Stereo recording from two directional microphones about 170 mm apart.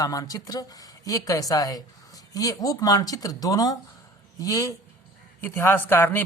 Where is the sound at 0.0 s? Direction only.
20° left (ahead or behind).